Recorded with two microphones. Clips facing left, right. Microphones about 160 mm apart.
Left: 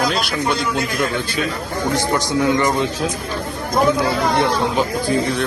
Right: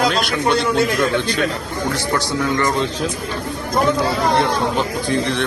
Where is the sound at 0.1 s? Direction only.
Centre (ahead or behind).